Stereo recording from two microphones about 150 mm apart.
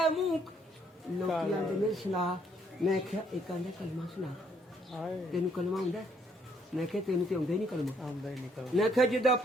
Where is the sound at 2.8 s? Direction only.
5° left (ahead or behind).